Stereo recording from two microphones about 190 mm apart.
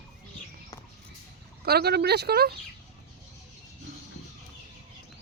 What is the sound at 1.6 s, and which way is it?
Speech, 55° right (ahead or behind).